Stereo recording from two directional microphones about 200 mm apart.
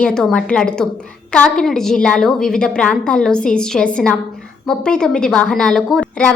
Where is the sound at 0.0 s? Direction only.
5° left (ahead or behind).